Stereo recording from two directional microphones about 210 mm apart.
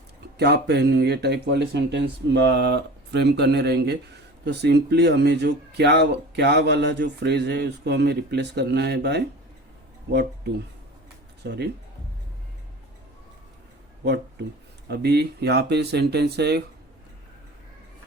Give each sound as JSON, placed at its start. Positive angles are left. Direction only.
{"t": 0.3, "sound": "a man's voice", "side_deg": -50}
{"t": 14.8, "sound": "a man's voice", "side_deg": -50}